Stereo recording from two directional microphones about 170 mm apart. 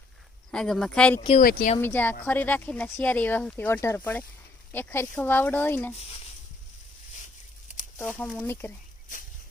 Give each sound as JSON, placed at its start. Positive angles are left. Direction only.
{"t": 0.5, "sound": "speech", "side_deg": 5}
{"t": 1.4, "sound": "speech", "side_deg": 55}
{"t": 1.8, "sound": "speech", "side_deg": 10}
{"t": 7.9, "sound": "speech", "side_deg": 10}